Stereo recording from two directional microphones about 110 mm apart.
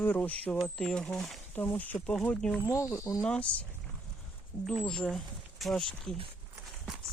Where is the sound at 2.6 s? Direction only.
25° left (ahead or behind).